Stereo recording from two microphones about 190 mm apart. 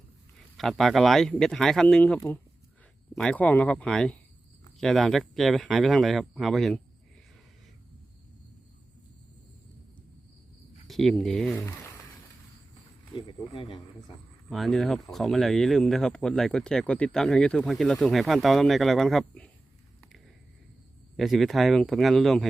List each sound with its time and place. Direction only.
0.3 s speech: centre (ahead or behind)
10.8 s speech: centre (ahead or behind)
13.1 s speech: 25° left (ahead or behind)
14.5 s speech: centre (ahead or behind)
21.2 s speech: centre (ahead or behind)